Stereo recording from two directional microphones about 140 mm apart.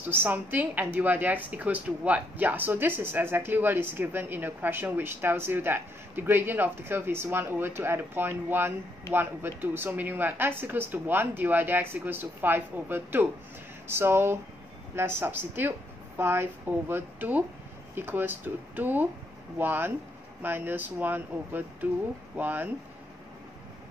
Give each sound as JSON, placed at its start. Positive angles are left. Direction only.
{"t": 0.0, "sound": "a woman's voice", "side_deg": -15}